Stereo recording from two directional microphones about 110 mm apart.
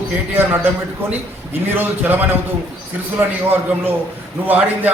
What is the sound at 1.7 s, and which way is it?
A man's voice, 15° right (ahead or behind).